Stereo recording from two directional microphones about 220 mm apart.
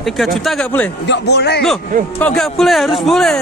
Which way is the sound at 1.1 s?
50° left (ahead or behind).